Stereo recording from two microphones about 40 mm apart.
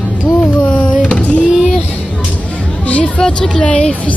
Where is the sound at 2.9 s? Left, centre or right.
Left.